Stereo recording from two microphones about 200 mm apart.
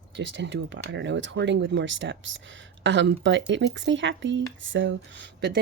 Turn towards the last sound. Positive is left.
turn(degrees=-60)  # may be behind; listen again after turning